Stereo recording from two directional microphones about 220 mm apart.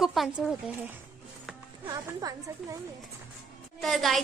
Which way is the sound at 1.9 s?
15° right (ahead or behind).